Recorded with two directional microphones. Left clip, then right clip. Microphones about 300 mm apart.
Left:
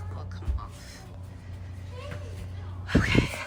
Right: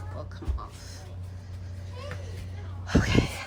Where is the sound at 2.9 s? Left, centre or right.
Centre.